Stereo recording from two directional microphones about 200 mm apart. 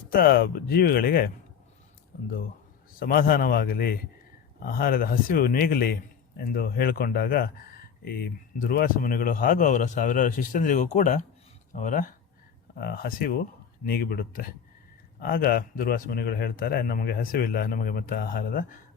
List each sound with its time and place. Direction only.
0.1 s speech: 50° left (ahead or behind)
3.0 s speech: 45° left (ahead or behind)